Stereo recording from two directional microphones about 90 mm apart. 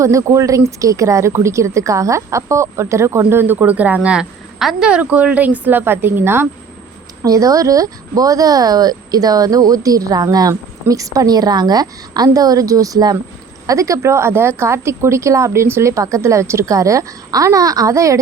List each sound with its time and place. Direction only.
0.0 s speech: 35° right (ahead or behind)
7.2 s a woman's voice: 40° right (ahead or behind)